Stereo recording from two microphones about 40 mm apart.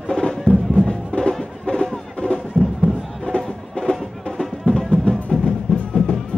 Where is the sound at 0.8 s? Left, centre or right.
Left.